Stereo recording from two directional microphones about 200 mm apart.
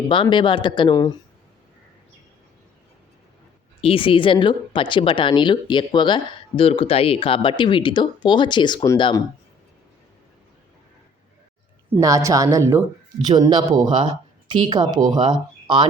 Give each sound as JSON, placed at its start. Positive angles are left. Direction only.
{"t": 0.1, "sound": "a woman's voice", "side_deg": 25}
{"t": 3.8, "sound": "a woman's voice", "side_deg": 30}
{"t": 11.9, "sound": "a woman's voice", "side_deg": -15}